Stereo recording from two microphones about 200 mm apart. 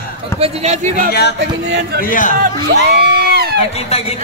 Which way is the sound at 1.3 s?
55° right (ahead or behind).